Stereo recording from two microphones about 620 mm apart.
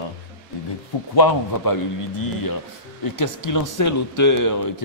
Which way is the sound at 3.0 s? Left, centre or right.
Left.